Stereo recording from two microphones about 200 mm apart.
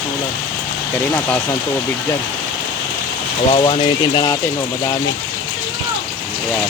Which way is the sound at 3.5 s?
25° left (ahead or behind).